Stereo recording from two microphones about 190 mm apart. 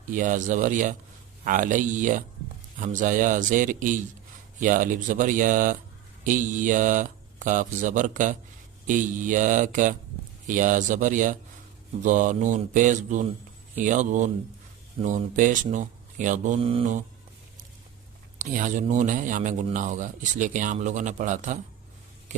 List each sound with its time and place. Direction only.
0.1 s speech: 40° right (ahead or behind)
18.3 s speech: 45° right (ahead or behind)